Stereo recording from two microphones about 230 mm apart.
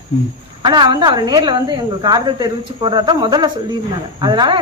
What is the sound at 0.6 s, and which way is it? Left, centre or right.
A woman's voice, centre.